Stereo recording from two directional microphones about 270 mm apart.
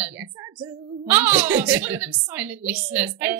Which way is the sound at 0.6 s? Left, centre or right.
Centre.